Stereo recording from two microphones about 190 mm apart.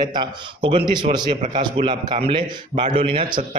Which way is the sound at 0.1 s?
25° right (ahead or behind).